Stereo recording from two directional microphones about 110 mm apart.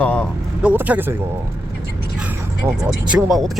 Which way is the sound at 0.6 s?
10° right (ahead or behind).